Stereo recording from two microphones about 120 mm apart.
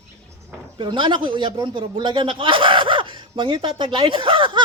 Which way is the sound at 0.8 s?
45° right (ahead or behind).